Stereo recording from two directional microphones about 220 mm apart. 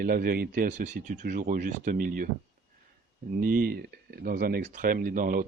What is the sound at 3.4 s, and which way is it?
Speech, 40° right (ahead or behind).